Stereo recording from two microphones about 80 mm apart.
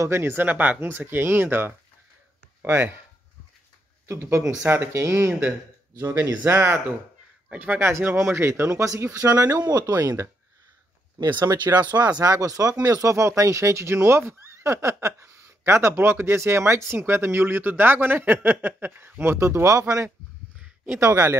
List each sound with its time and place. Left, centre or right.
0.0 s speech: right
4.1 s speech: right
5.9 s speech: right
9.6 s speech: right
10.0 s speech: right
11.1 s speech: right
21.0 s speech: right